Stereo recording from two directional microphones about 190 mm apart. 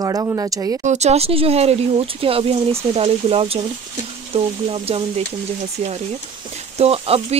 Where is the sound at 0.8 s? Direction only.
35° right (ahead or behind).